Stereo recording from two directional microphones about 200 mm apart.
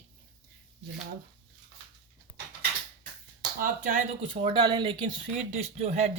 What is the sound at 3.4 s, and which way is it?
Speech, 40° right (ahead or behind).